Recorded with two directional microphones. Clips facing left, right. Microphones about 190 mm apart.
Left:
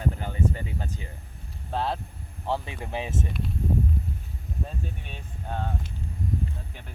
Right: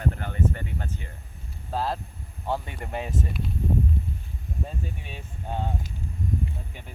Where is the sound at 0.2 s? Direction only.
10° left (ahead or behind).